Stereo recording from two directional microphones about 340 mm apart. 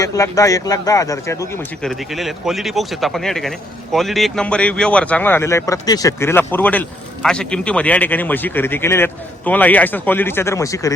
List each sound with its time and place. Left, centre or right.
0.0 s speech: centre